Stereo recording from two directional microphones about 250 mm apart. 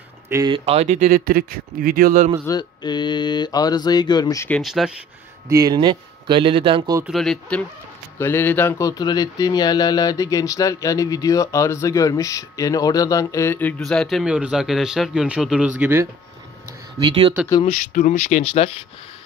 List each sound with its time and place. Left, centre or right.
0.3 s speech: centre; by 2.3 s right
2.4 s speech: centre
4.6 s speech: centre
5.5 s a man's voice: centre
7.1 s speech: centre
17.6 s speech: left